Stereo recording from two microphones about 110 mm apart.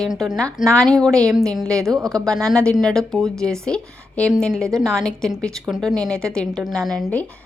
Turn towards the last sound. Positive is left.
turn(degrees=5)  # may be behind; listen again after turning